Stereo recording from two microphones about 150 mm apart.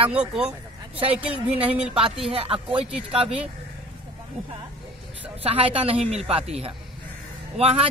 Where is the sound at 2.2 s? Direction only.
40° right (ahead or behind).